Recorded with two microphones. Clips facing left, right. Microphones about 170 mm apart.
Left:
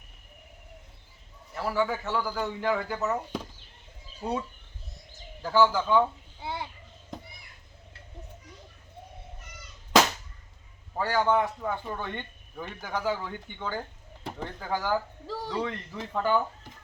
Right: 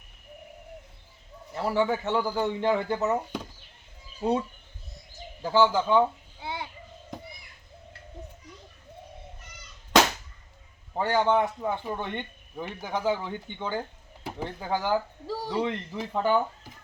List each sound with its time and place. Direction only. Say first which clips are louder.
1.5 s speech: right 3 dB; 25° right (ahead or behind)
4.2 s speech: right 5 dB; 25° right (ahead or behind)
6.4 s a sound: even; centre (ahead or behind)
10.9 s speech: right 2 dB; 20° right (ahead or behind)